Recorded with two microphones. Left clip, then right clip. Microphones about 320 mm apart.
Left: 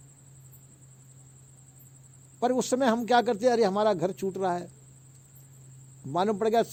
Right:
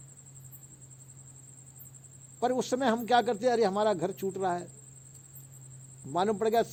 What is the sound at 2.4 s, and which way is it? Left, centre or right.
A man's voice, left.